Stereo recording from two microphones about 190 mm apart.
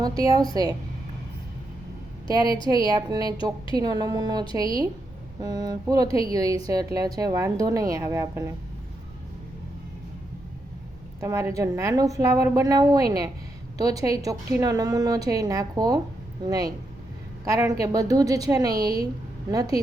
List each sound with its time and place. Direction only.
0.0 s a woman's voice: 20° right (ahead or behind)
2.3 s a woman's voice: 20° right (ahead or behind)
11.2 s a woman's voice: 15° right (ahead or behind)